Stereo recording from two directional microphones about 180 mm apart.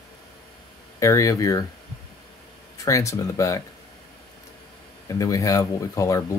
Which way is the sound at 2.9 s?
15° left (ahead or behind).